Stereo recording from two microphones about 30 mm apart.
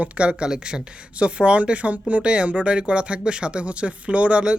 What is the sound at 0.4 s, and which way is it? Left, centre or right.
Speech, right.